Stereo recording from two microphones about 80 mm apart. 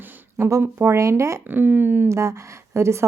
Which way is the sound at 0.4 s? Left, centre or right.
Right.